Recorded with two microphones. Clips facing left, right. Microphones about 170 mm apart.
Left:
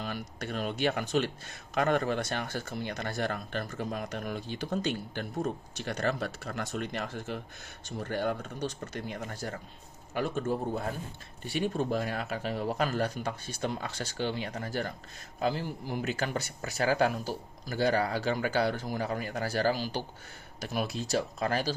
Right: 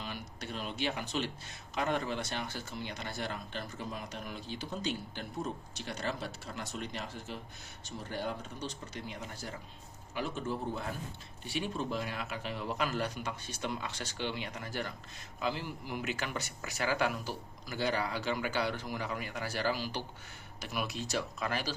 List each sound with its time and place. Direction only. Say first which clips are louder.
0.0 s speech: left 5 dB; 50° left (ahead or behind)